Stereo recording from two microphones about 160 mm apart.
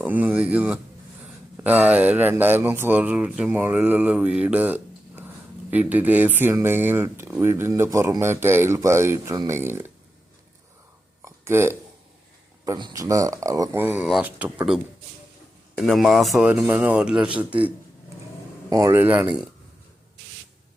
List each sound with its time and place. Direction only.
0.0 s speech: 10° right (ahead or behind)
11.2 s a sound: 15° right (ahead or behind)
12.6 s a man's voice: 25° right (ahead or behind); by 17.7 s 10° right (ahead or behind)
18.7 s speech: 20° right (ahead or behind)